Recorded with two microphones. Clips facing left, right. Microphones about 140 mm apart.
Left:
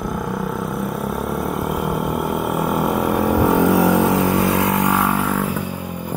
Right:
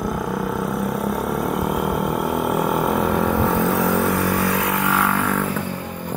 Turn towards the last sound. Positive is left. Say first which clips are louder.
# left 1 dB
turn(degrees=10)  # may be behind; listen again after turning